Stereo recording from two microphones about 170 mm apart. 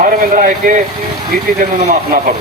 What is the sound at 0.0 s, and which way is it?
Speech, 50° right (ahead or behind).